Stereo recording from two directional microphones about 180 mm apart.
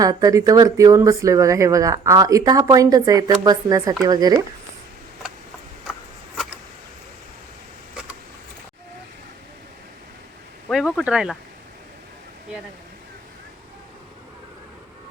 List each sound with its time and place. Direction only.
0.0 s speech: 20° right (ahead or behind)
6.3 s a sound: centre (ahead or behind)
10.7 s speech: centre (ahead or behind)